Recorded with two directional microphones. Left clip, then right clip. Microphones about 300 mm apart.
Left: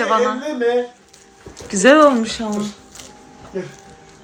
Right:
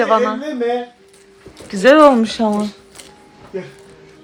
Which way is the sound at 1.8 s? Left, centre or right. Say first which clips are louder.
Right 2 dB; centre.